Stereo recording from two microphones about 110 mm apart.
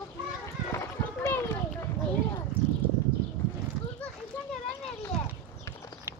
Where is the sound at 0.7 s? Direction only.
25° left (ahead or behind).